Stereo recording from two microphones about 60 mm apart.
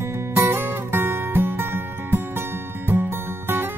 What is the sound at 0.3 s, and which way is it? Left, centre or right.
Music, right.